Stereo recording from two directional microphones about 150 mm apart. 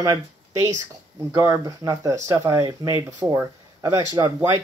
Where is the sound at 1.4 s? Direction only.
20° right (ahead or behind).